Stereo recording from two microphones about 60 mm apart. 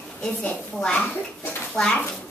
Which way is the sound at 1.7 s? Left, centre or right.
Centre.